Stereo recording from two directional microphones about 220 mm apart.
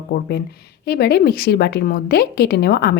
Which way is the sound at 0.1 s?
50° left (ahead or behind).